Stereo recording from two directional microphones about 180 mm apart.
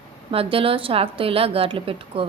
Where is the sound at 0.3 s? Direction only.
30° right (ahead or behind).